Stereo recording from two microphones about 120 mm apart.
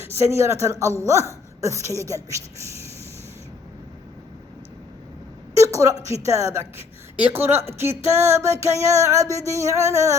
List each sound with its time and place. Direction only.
0.0 s music: 25° right (ahead or behind)
5.5 s a sound: 25° right (ahead or behind)
6.2 s music: 25° right (ahead or behind)